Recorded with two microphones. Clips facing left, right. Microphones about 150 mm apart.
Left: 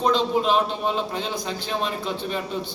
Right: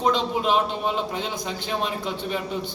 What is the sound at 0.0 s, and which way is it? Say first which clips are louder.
A man's voice: left 2 dB; 10° right (ahead or behind).